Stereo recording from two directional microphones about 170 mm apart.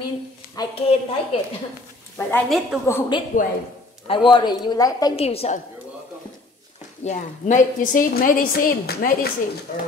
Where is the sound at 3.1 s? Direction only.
25° left (ahead or behind).